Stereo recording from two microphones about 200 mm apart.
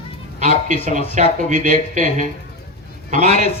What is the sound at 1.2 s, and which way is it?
Speech, 35° right (ahead or behind).